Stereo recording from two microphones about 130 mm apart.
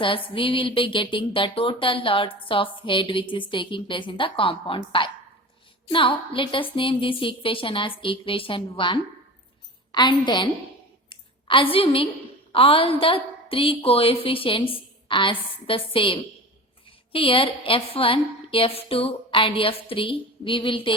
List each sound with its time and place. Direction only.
0.0 s a woman's voice: 40° left (ahead or behind)
11.1 s a sound: 40° left (ahead or behind)
12.5 s a woman's voice: 45° left (ahead or behind)